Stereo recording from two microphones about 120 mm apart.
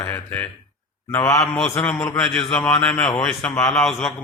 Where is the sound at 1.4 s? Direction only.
Centre (ahead or behind).